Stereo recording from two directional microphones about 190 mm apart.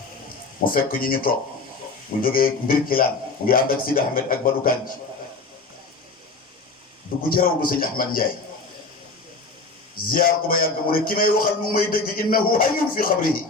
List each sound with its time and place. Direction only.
0.6 s a man's voice: 50° left (ahead or behind)
7.3 s a man's voice: 50° left (ahead or behind)
9.9 s a man's voice: 50° left (ahead or behind)